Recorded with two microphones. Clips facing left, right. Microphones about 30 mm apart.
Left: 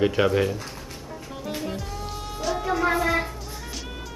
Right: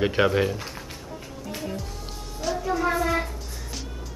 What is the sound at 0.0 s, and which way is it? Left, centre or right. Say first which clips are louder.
Speech: left 1 dB; centre.